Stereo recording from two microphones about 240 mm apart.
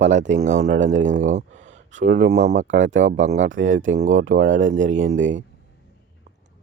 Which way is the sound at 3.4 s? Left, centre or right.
Right.